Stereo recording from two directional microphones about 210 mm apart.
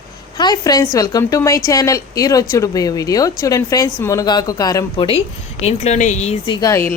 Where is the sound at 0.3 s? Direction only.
20° left (ahead or behind).